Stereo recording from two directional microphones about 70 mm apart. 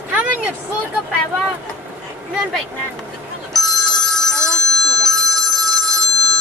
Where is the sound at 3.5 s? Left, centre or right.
Centre.